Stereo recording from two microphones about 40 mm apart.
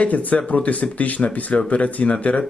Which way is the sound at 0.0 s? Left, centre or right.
Left.